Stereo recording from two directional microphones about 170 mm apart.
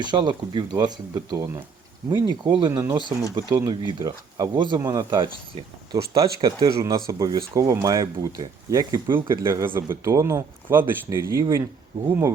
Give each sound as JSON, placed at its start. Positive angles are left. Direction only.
{"t": 0.0, "sound": "speech", "side_deg": -25}